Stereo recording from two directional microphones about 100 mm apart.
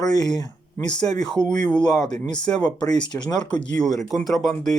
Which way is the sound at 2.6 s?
45° left (ahead or behind).